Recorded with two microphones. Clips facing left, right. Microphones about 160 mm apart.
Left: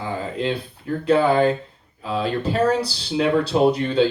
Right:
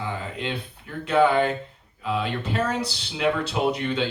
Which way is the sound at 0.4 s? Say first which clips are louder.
Left 7 dB; 35° left (ahead or behind).